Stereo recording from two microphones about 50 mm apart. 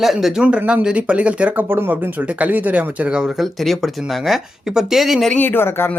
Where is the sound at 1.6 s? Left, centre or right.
Right.